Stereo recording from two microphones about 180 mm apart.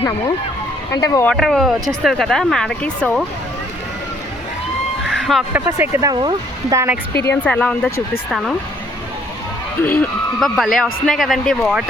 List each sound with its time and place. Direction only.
1.0 s speech: 20° left (ahead or behind)
1.3 s speech: centre (ahead or behind)
5.0 s a sound: centre (ahead or behind)
5.6 s speech: 15° right (ahead or behind)
6.7 s speech: 10° right (ahead or behind)
7.3 s speech: 10° left (ahead or behind)
8.3 s speech: centre (ahead or behind)
9.8 s speech: 10° left (ahead or behind)